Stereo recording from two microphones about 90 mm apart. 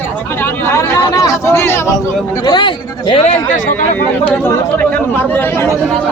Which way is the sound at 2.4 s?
60° left (ahead or behind).